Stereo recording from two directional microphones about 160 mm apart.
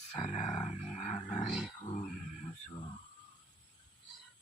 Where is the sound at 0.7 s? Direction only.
45° left (ahead or behind).